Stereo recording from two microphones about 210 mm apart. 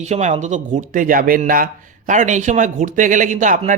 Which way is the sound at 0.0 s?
35° right (ahead or behind).